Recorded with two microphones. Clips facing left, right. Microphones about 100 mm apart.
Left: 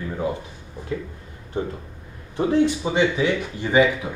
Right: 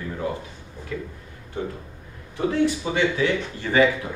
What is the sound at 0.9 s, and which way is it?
Speech, 30° left (ahead or behind).